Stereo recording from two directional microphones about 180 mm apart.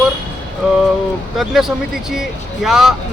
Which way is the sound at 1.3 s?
Centre (ahead or behind).